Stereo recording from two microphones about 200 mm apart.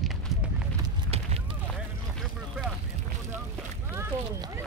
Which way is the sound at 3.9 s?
15° right (ahead or behind).